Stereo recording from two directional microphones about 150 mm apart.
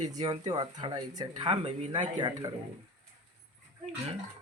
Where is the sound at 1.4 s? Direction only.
45° right (ahead or behind).